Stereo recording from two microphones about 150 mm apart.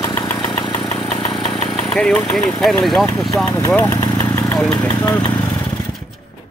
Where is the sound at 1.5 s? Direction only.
45° left (ahead or behind).